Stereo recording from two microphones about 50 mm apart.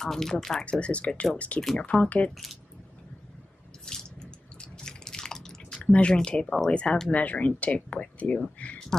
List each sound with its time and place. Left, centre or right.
0.0 s speech: centre
0.7 s speech: left
3.8 s drip: centre
5.9 s speech: left
6.4 s speech: centre
6.7 s speech: left
7.1 s speech: left